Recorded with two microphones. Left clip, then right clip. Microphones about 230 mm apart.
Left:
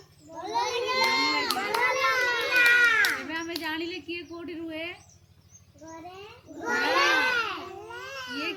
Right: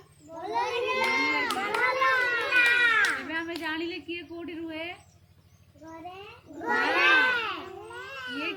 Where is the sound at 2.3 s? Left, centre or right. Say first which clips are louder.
Left 1 dB; centre.